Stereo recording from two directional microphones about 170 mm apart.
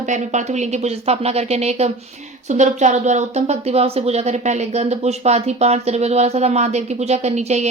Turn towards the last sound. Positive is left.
turn(degrees=-40)  # may be behind; listen again after turning